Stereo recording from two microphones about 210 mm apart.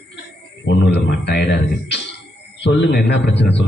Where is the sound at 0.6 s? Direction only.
55° left (ahead or behind).